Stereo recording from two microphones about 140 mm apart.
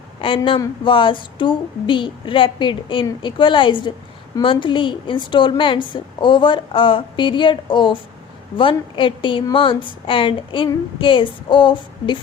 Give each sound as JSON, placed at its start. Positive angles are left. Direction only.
{"t": 0.2, "sound": "a man's voice", "side_deg": 40}